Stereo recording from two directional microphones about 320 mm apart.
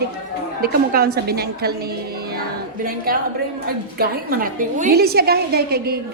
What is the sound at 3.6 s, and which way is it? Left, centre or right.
A woman's voice, right.